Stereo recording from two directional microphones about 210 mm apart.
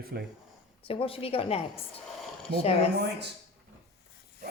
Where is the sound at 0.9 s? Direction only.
25° left (ahead or behind).